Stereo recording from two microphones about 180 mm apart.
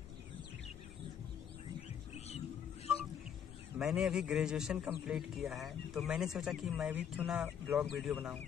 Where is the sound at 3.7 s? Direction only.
5° right (ahead or behind).